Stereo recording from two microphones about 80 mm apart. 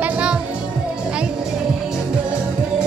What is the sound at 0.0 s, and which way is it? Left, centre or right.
Music, centre.